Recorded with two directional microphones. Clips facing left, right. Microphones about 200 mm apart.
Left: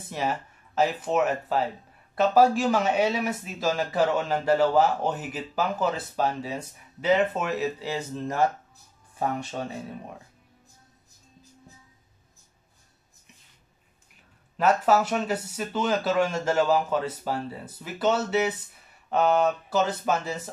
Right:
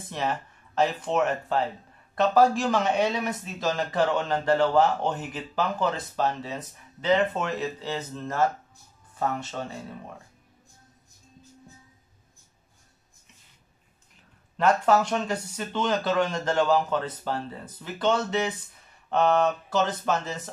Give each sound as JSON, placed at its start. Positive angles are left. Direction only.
{"t": 0.1, "sound": "speech", "side_deg": 10}
{"t": 14.6, "sound": "speech", "side_deg": 5}